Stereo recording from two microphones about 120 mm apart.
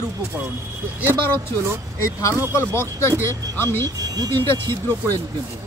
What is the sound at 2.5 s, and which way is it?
Speech, 20° left (ahead or behind).